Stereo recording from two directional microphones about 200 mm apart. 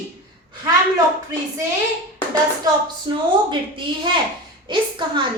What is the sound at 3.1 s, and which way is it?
A woman's voice, 20° right (ahead or behind).